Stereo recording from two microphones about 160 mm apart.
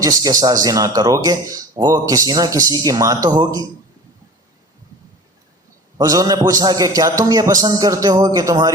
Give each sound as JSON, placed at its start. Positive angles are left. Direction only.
{"t": 0.0, "sound": "speech", "side_deg": -20}
{"t": 6.0, "sound": "speech", "side_deg": -25}